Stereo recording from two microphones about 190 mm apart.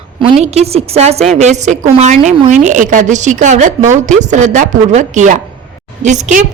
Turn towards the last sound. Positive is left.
turn(degrees=-40)  # may be behind; listen again after turning